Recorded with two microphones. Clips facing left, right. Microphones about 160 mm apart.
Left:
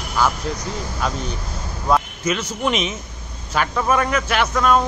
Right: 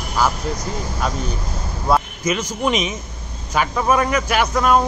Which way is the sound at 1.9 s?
10° right (ahead or behind).